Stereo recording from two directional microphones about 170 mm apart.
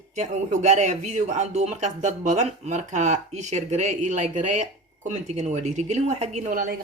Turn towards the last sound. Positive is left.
turn(degrees=-50)  # may be behind; listen again after turning